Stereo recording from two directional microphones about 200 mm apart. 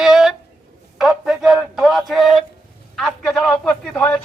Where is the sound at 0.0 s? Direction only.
Centre (ahead or behind).